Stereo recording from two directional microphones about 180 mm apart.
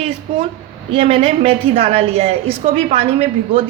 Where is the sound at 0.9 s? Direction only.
35° right (ahead or behind).